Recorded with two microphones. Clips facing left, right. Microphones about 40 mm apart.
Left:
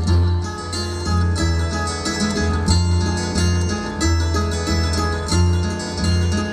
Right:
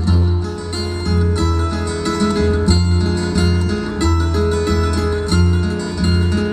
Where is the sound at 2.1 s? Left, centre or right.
Right.